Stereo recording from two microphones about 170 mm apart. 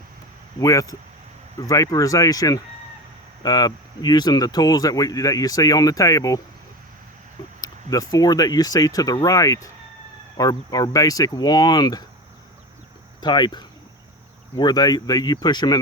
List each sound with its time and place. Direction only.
0.6 s speech: 20° left (ahead or behind)
7.6 s speech: 20° left (ahead or behind)
13.2 s speech: 25° left (ahead or behind)